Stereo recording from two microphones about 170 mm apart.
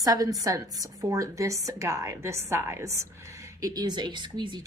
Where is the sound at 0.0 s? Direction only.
20° right (ahead or behind).